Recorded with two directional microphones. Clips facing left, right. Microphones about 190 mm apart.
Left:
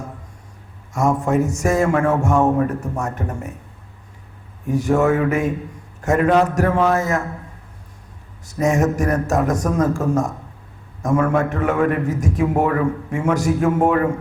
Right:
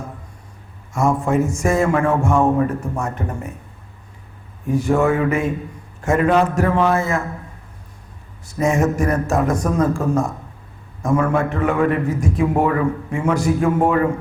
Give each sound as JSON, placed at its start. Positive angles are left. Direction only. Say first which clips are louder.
{"t": 0.9, "sound": "a man's voice", "louder": "even", "side_deg": 40}
{"t": 4.7, "sound": "a man's voice", "louder": "even", "side_deg": 45}
{"t": 8.4, "sound": "a man's voice", "louder": "even", "side_deg": 40}